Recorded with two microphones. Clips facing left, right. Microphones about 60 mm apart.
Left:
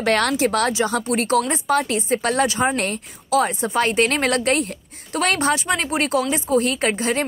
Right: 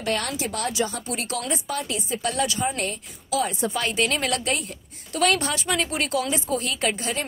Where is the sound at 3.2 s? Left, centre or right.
Left.